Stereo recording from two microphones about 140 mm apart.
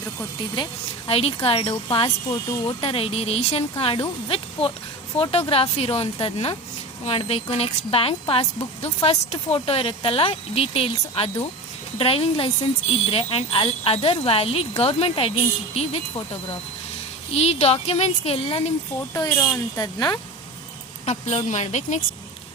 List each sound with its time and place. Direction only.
0.5 s a woman's voice: 40° left (ahead or behind)
2.3 s speech: 30° left (ahead or behind)
2.8 s a woman's voice: 45° left (ahead or behind)
5.1 s a woman's voice: 45° left (ahead or behind)
17.3 s a woman's voice: 50° left (ahead or behind)
19.1 s speech: 25° left (ahead or behind)
21.0 s speech: 55° left (ahead or behind)